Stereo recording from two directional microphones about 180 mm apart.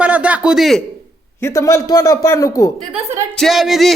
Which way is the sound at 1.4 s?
15° left (ahead or behind).